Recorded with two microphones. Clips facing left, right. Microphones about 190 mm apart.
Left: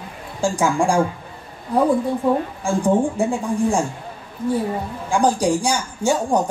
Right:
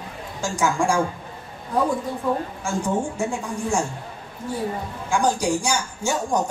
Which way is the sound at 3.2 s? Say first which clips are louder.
Left 6 dB; 35° left (ahead or behind).